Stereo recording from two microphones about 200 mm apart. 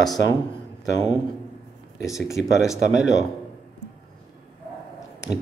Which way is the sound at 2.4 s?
60° left (ahead or behind).